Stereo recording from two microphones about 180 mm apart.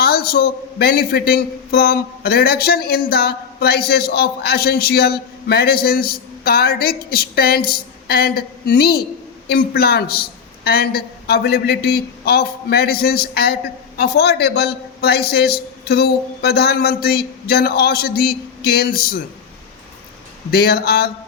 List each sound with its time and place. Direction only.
0.0 s a man's voice: 60° left (ahead or behind)
20.5 s a man's voice: 60° left (ahead or behind)